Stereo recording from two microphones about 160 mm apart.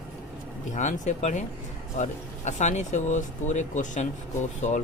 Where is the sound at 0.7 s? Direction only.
50° left (ahead or behind).